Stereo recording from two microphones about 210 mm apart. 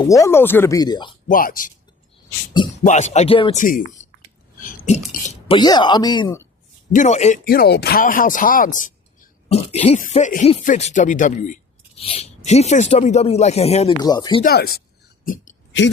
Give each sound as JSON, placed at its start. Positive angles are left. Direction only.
{"t": 0.0, "sound": "speech", "side_deg": 15}
{"t": 1.3, "sound": "speech", "side_deg": 40}
{"t": 2.8, "sound": "speech", "side_deg": 35}
{"t": 3.6, "sound": "speech", "side_deg": 40}
{"t": 5.5, "sound": "speech", "side_deg": 20}
{"t": 6.9, "sound": "speech", "side_deg": 35}
{"t": 14.0, "sound": "speech", "side_deg": 20}
{"t": 14.4, "sound": "speech", "side_deg": 45}